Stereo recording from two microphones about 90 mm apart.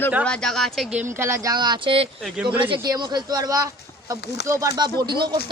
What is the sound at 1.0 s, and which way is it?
Speech, 30° right (ahead or behind).